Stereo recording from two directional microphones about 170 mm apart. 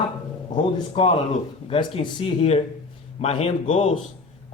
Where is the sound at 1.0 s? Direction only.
30° left (ahead or behind).